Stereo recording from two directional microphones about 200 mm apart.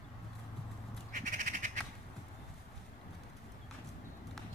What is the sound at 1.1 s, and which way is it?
Crow, 40° right (ahead or behind).